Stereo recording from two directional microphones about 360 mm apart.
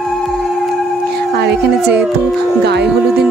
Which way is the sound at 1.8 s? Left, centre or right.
Centre.